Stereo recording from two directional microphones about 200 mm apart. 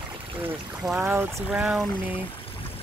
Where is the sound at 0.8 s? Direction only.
5° right (ahead or behind).